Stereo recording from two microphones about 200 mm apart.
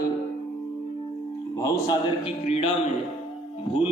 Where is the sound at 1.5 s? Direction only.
15° left (ahead or behind).